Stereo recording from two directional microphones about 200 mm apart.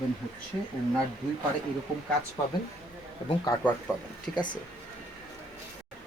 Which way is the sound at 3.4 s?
15° left (ahead or behind).